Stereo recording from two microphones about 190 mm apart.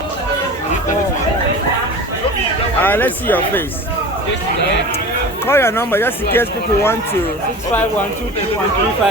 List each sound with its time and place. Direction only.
2.8 s speech: 10° left (ahead or behind)
5.5 s speech: 10° left (ahead or behind)